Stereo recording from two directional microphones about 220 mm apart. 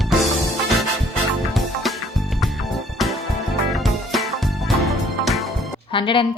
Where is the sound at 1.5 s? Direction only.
Centre (ahead or behind).